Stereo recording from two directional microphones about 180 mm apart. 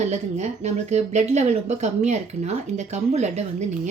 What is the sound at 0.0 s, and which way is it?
Speech, 40° right (ahead or behind).